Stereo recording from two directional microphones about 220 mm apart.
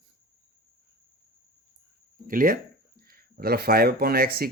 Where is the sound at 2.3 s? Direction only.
40° right (ahead or behind).